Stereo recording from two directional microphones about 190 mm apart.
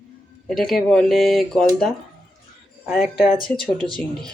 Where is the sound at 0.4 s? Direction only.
Centre (ahead or behind).